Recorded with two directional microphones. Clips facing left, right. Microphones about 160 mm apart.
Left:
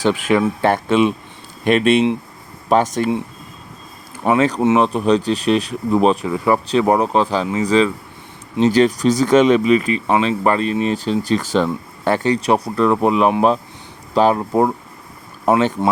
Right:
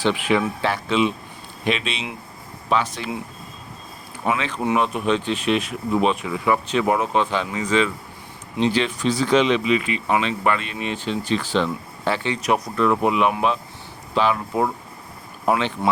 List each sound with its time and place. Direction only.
0.0 s speech: 45° left (ahead or behind)
4.3 s speech: 40° left (ahead or behind)